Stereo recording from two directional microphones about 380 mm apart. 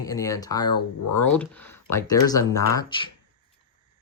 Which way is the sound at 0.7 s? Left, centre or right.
Left.